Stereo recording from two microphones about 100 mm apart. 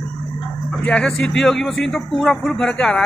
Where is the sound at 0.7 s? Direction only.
10° left (ahead or behind).